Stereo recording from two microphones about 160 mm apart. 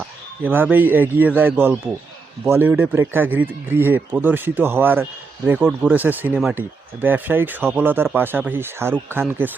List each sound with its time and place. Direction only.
0.4 s speech: 10° right (ahead or behind)